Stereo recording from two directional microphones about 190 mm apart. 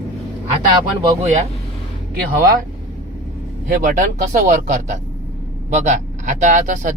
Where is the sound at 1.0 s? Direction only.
35° right (ahead or behind).